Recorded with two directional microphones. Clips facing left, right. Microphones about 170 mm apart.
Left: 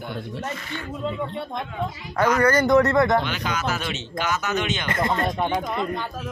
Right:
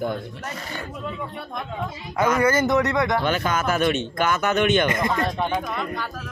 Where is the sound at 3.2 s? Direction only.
50° right (ahead or behind).